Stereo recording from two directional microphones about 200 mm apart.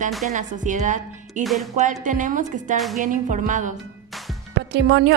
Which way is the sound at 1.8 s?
40° right (ahead or behind).